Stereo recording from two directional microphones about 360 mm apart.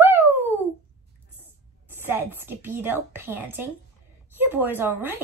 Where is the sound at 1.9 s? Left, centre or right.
Centre.